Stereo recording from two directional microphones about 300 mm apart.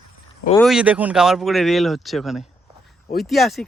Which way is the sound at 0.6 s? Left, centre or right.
Centre.